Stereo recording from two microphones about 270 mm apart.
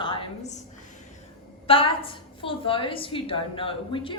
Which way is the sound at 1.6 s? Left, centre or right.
Centre.